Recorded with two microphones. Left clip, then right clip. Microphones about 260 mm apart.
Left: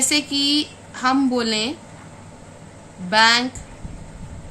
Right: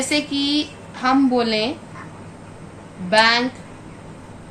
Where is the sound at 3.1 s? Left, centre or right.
Left.